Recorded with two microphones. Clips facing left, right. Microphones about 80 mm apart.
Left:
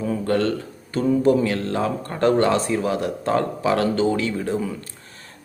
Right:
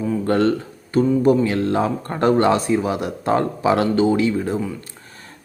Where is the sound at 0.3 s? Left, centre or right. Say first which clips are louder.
Right 4 dB; right.